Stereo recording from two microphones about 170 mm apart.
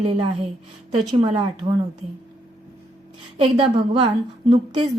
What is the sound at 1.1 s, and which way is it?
Speech, 30° right (ahead or behind).